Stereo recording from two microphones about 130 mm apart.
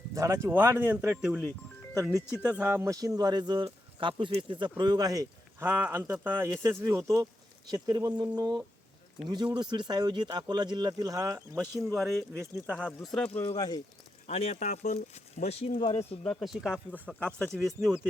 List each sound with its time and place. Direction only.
0.1 s speech: 25° right (ahead or behind)
5.5 s speech: 15° right (ahead or behind)
11.9 s speech: centre (ahead or behind)
13.6 s speech: 30° left (ahead or behind)
14.3 s speech: 55° left (ahead or behind)
16.4 s speech: centre (ahead or behind)
17.2 s speech: 5° left (ahead or behind)
17.8 s speech: 5° right (ahead or behind)